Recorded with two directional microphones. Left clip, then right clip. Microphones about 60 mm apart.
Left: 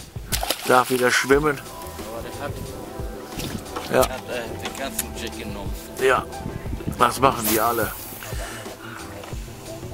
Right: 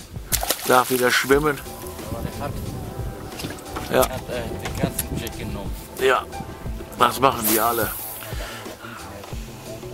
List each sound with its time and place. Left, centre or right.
0.3 s a sound: centre
1.0 s speech: centre
3.7 s speech: centre
4.9 s speech: centre
5.9 s speech: centre